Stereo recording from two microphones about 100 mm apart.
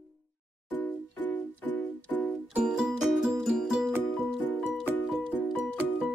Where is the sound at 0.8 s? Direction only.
15° left (ahead or behind).